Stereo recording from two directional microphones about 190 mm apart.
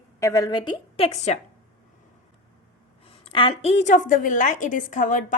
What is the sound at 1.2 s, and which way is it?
Speech, 35° left (ahead or behind).